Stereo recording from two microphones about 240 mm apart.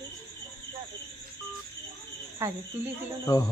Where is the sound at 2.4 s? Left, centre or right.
Centre.